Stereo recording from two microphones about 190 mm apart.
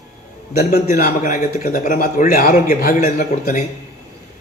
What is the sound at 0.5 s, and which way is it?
A man's voice, 45° left (ahead or behind).